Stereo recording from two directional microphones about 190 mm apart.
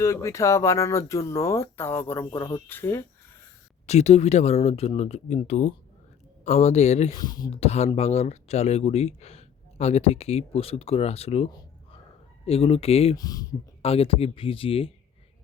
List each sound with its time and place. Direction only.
0.0 s speech: 15° left (ahead or behind)
3.8 s speech: 35° left (ahead or behind)
7.1 s speech: 20° left (ahead or behind)
13.1 s speech: 20° left (ahead or behind)
13.8 s speech: 30° left (ahead or behind)